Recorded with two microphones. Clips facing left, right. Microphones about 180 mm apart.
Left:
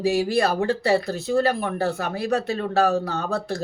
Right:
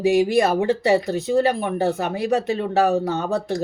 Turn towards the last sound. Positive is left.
turn(degrees=-20)  # may be behind; listen again after turning